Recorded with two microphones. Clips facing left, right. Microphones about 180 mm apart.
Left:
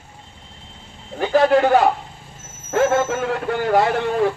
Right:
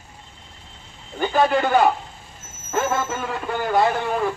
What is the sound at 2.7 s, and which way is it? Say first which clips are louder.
A man's voice: left 6 dB; 70° left (ahead or behind).